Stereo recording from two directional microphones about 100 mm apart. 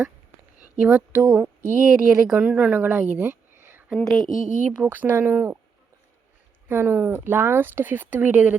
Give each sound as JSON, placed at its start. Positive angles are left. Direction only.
{"t": 0.6, "sound": "speech", "side_deg": -10}
{"t": 3.9, "sound": "speech", "side_deg": 5}
{"t": 4.6, "sound": "speech", "side_deg": -15}
{"t": 6.7, "sound": "speech", "side_deg": -20}